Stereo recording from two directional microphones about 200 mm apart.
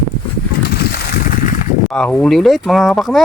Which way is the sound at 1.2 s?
40° left (ahead or behind).